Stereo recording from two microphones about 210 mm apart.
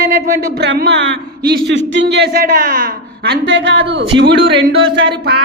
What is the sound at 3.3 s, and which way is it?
A man's voice, 55° right (ahead or behind).